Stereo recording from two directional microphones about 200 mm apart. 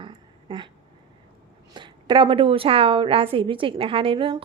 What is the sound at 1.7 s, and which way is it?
A woman's voice, 20° right (ahead or behind).